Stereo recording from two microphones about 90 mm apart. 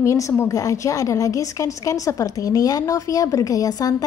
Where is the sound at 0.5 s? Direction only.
35° left (ahead or behind).